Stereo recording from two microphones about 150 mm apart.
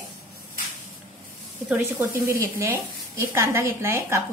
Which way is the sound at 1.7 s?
15° right (ahead or behind).